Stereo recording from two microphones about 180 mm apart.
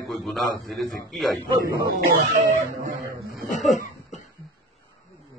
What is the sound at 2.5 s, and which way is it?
Music, 45° right (ahead or behind).